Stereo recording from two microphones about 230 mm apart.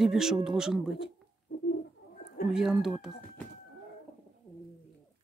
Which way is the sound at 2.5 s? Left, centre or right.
Centre.